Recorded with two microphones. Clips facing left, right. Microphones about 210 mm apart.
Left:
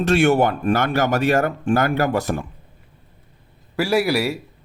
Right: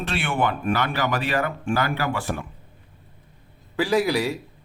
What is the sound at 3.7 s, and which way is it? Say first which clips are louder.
Speech: left 2 dB; 10° left (ahead or behind).